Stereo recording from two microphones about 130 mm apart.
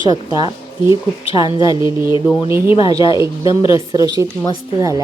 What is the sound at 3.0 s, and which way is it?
Speech, 40° left (ahead or behind).